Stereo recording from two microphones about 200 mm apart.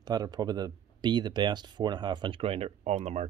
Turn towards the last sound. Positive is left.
turn(degrees=-35)  # may be behind; listen again after turning